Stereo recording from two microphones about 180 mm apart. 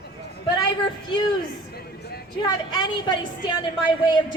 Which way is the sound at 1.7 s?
60° left (ahead or behind).